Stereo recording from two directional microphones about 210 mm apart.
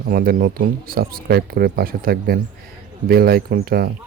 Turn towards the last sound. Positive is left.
turn(degrees=-45)  # may be behind; listen again after turning